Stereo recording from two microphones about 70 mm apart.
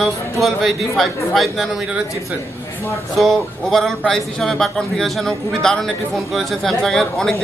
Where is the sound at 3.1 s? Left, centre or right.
Centre.